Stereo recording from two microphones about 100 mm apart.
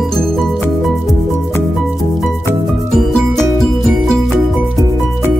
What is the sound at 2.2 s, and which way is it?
Music, centre (ahead or behind).